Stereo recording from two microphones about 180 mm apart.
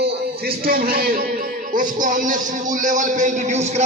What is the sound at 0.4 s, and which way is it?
A man's voice, 60° right (ahead or behind).